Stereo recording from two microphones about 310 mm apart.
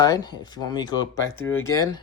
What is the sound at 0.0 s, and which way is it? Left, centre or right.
Speech, centre.